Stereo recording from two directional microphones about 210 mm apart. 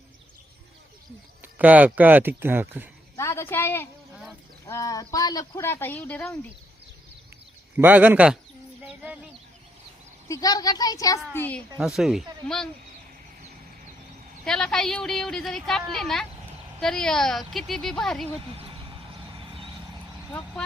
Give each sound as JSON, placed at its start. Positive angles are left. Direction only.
{"t": 1.4, "sound": "speech", "side_deg": -10}
{"t": 3.2, "sound": "a woman's voice", "side_deg": 15}
{"t": 7.8, "sound": "speech", "side_deg": -10}
{"t": 10.2, "sound": "a woman's voice", "side_deg": 15}
{"t": 14.4, "sound": "a woman's voice", "side_deg": 0}
{"t": 18.5, "sound": "speech", "side_deg": -25}
{"t": 19.4, "sound": "vehicle", "side_deg": -25}